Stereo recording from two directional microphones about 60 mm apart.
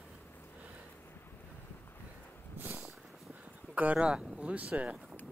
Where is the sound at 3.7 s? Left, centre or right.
Right.